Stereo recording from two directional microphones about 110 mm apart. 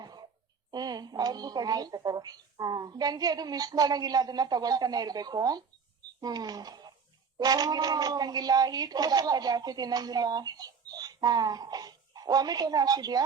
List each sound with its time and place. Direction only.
0.0 s throat clearing: 40° right (ahead or behind)
0.7 s speech: 35° right (ahead or behind)